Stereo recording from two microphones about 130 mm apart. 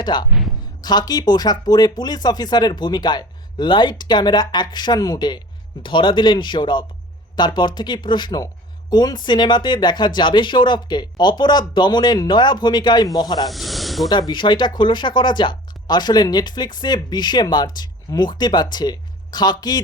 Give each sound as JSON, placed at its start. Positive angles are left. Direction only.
{"t": 0.0, "sound": "speech", "side_deg": 35}
{"t": 13.5, "sound": "snake", "side_deg": 0}
{"t": 14.1, "sound": "speech", "side_deg": 35}